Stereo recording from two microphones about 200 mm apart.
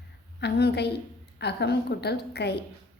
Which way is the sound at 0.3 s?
55° left (ahead or behind).